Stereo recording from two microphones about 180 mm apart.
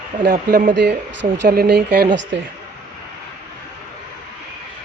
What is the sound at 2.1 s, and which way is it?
Speech, 80° right.